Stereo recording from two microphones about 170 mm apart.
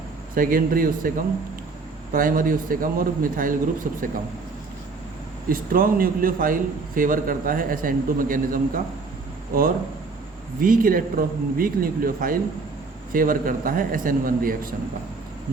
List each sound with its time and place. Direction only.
0.3 s a man's voice: 55° right (ahead or behind)
2.1 s a man's voice: 55° right (ahead or behind)
5.5 s a man's voice: 55° right (ahead or behind)
10.6 s a man's voice: 55° right (ahead or behind)